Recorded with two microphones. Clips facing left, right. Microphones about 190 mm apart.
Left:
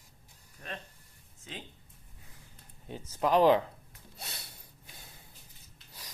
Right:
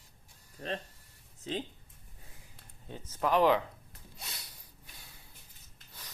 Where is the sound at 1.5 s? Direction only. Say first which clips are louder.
Right 9 dB; 30° right (ahead or behind).